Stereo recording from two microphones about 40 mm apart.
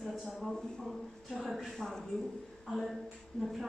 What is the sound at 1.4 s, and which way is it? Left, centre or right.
Speech, centre.